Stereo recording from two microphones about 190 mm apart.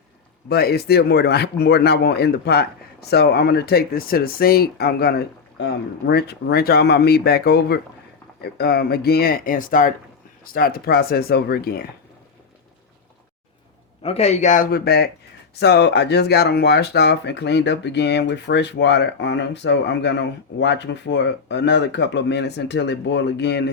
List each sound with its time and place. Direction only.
0.4 s speech: 55° left (ahead or behind)
14.0 s speech: 35° left (ahead or behind); by 23.7 s 65° left (ahead or behind)